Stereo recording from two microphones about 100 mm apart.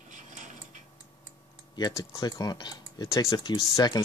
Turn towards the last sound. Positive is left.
turn(degrees=40)  # may be behind; listen again after turning